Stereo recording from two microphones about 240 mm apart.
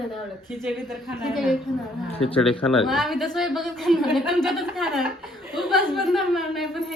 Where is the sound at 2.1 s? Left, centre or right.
Left.